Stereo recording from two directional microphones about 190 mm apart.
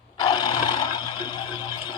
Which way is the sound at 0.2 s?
25° left (ahead or behind).